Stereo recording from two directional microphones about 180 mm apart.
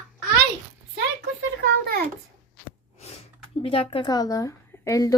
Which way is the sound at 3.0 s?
35° left (ahead or behind).